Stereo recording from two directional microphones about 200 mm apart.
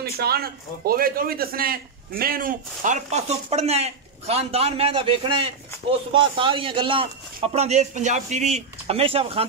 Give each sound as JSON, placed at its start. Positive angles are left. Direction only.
{"t": 0.0, "sound": "a man's voice", "side_deg": -50}